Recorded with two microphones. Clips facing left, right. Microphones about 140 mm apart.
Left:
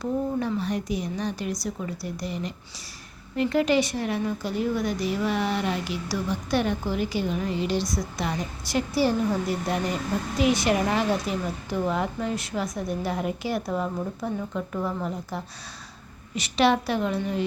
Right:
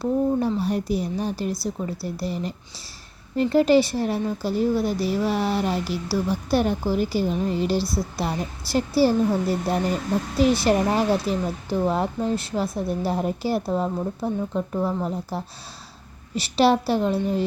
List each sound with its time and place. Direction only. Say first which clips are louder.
0.0 s a woman's voice: right 5 dB; 35° right (ahead or behind)